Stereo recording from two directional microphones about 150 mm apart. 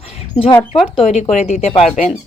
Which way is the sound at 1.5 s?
45° left (ahead or behind).